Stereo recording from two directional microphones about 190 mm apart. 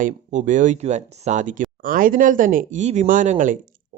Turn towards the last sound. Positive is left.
turn(degrees=-40)  # may be behind; listen again after turning